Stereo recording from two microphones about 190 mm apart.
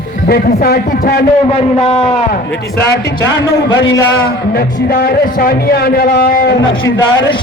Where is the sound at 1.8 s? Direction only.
30° left (ahead or behind).